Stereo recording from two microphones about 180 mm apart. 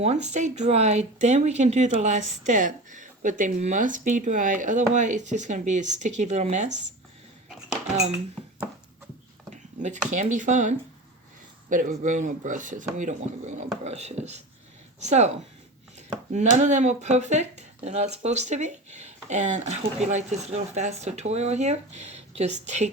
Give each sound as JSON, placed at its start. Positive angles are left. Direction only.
{"t": 0.0, "sound": "speech", "side_deg": -40}
{"t": 9.5, "sound": "speech", "side_deg": -40}
{"t": 16.3, "sound": "speech", "side_deg": -40}